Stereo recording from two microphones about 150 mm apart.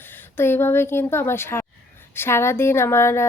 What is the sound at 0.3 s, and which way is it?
A woman's voice, 15° left (ahead or behind).